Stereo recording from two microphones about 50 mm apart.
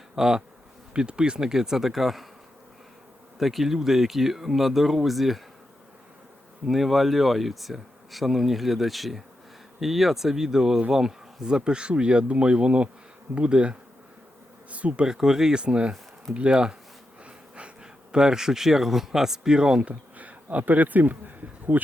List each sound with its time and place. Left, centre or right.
0.2 s speech: centre
3.3 s speech: centre
6.7 s speech: centre; by 15.0 s right
15.0 s speech: centre
17.2 s a sound: right
18.1 s speech: centre
19.9 s speech: right